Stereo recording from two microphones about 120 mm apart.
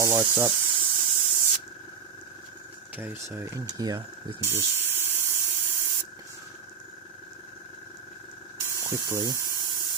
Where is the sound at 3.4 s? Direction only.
30° right (ahead or behind).